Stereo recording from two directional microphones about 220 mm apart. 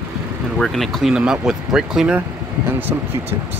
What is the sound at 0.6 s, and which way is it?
Speech, centre (ahead or behind).